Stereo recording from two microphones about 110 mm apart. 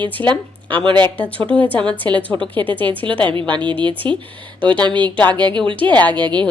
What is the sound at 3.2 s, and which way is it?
A woman's voice, 50° right (ahead or behind).